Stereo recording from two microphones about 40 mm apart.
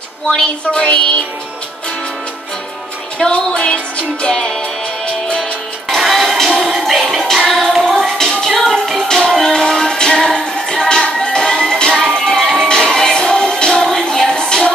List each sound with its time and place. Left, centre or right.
0.3 s music: left
3.3 s music: left
5.9 s music: centre
6.5 s music: centre